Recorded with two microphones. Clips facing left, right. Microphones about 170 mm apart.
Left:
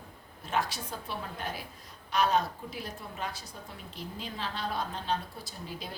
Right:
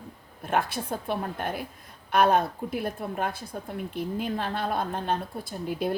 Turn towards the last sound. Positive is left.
turn(degrees=-55)  # may be behind; listen again after turning